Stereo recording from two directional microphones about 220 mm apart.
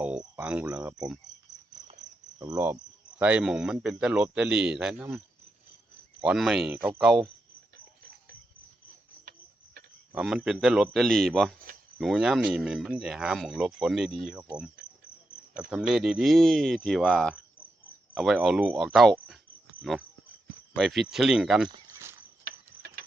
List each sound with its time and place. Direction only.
0.0 s speech: 5° right (ahead or behind)
2.4 s speech: 15° right (ahead or behind)
6.2 s speech: centre (ahead or behind)
10.1 s speech: 5° right (ahead or behind)
15.7 s speech: centre (ahead or behind)
22.4 s ratchet: 40° right (ahead or behind)